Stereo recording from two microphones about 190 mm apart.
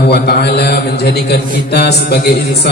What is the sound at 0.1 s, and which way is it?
A man's voice, 55° left (ahead or behind).